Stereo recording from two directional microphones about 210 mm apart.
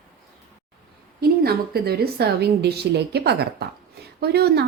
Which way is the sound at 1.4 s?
50° right (ahead or behind).